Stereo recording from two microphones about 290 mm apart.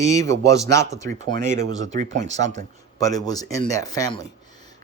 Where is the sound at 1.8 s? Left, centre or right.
Right.